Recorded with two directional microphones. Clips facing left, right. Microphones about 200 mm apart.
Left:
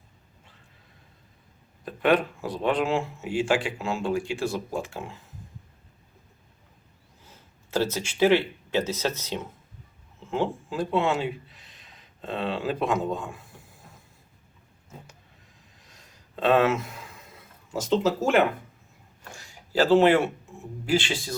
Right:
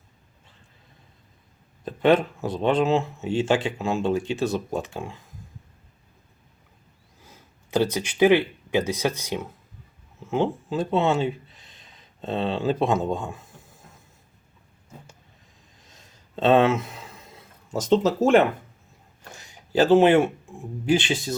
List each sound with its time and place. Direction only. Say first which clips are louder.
1.8 s speech: right 3 dB; 25° right (ahead or behind)
7.3 s speech: right 3 dB; 15° right (ahead or behind)
15.9 s a sound: right 1 dB; 25° right (ahead or behind)
17.8 s speech: right 4 dB; 35° right (ahead or behind)
19.4 s speech: right 3 dB; 20° right (ahead or behind)